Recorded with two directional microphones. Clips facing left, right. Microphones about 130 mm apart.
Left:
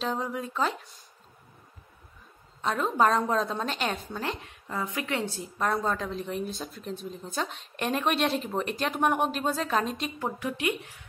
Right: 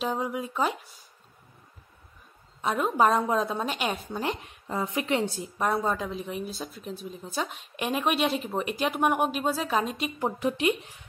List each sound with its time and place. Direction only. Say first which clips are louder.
0.0 s a woman's voice: right 1 dB; 10° right (ahead or behind)
2.6 s a woman's voice: right 1 dB; 10° right (ahead or behind)
10.1 s a woman's voice: right 4 dB; 20° right (ahead or behind)